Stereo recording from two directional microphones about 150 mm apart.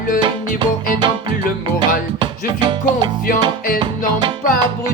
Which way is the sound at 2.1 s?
30° right (ahead or behind).